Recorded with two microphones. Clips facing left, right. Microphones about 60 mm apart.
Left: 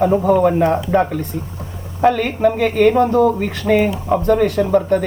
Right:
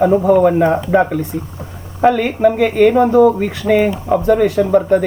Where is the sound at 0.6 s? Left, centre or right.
Centre.